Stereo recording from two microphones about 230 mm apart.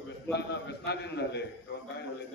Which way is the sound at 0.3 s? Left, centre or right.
Left.